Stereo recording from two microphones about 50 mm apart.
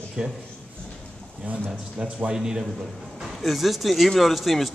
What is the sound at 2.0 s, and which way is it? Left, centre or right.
Speech, centre.